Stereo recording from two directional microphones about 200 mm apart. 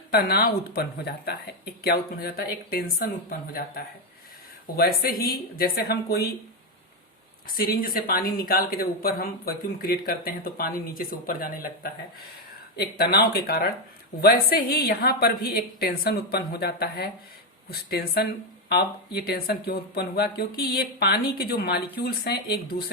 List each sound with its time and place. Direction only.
0.1 s a woman's voice: 50° left (ahead or behind)
4.9 s a woman's voice: 45° left (ahead or behind)
7.4 s a woman's voice: 45° left (ahead or behind)